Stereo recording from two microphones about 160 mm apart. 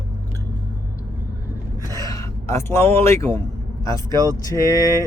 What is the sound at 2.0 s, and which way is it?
Speech, 20° left (ahead or behind).